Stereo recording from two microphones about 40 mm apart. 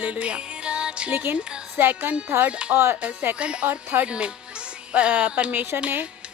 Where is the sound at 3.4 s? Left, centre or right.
Right.